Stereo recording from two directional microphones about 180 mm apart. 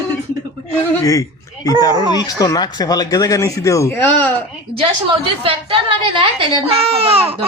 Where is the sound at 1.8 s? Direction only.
20° left (ahead or behind).